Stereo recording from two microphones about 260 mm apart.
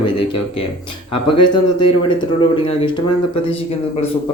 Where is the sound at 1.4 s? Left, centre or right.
Centre.